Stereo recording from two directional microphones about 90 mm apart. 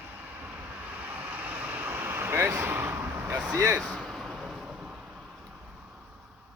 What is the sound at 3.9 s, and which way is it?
Vehicle, centre (ahead or behind).